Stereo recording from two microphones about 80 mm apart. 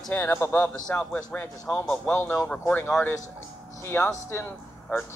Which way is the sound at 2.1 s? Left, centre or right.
Left.